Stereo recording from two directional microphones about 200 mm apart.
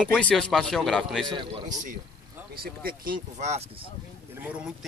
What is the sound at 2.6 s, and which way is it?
Speech, 45° right (ahead or behind).